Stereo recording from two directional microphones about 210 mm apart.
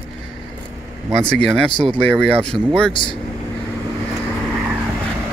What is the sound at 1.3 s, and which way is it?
Speech, 5° left (ahead or behind).